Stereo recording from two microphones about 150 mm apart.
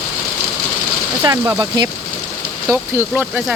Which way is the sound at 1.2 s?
25° right (ahead or behind).